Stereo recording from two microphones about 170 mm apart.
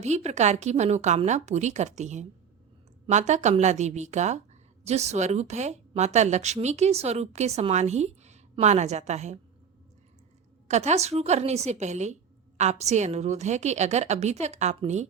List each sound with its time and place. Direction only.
0.0 s a woman's voice: 40° right (ahead or behind)
10.7 s a woman's voice: 40° right (ahead or behind)